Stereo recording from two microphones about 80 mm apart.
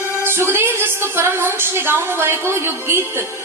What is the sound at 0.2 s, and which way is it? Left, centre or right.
A woman's voice, right.